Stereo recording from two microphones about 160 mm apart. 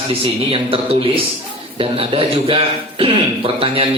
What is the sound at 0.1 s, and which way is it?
Speech, 35° right (ahead or behind).